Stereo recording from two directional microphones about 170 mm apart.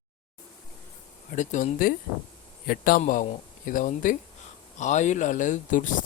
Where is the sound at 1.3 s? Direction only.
45° left (ahead or behind).